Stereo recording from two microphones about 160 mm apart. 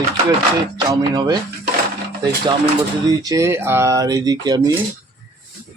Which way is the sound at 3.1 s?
25° right (ahead or behind).